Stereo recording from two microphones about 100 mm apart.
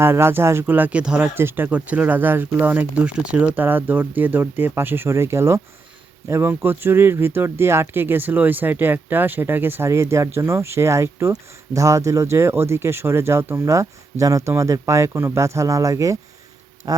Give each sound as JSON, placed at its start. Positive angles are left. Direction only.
{"t": 0.0, "sound": "speech", "side_deg": -25}
{"t": 1.4, "sound": "speech", "side_deg": -20}
{"t": 16.8, "sound": "tick-tock", "side_deg": -40}